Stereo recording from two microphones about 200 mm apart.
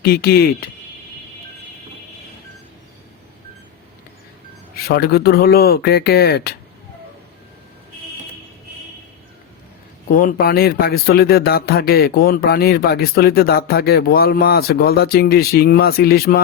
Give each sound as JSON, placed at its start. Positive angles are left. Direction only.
{"t": 0.0, "sound": "speech", "side_deg": 50}
{"t": 4.9, "sound": "speech", "side_deg": 50}
{"t": 10.1, "sound": "speech", "side_deg": 45}